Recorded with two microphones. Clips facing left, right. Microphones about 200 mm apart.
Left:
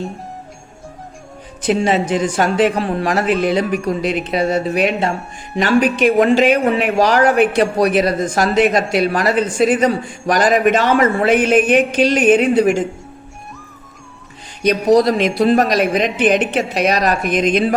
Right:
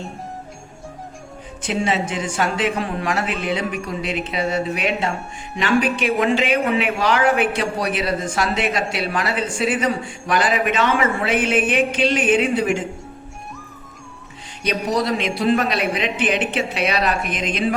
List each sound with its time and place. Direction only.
1.6 s speech: 40° left (ahead or behind)
14.7 s speech: 40° left (ahead or behind)